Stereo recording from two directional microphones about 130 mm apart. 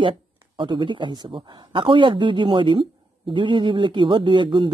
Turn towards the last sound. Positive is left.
turn(degrees=-35)  # may be behind; listen again after turning